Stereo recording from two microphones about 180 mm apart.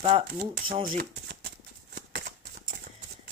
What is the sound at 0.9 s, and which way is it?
Speech, 55° right (ahead or behind).